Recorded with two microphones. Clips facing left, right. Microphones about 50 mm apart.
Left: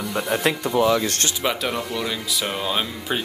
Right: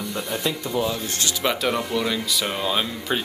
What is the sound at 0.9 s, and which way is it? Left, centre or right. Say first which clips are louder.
Speech: left 7 dB; left.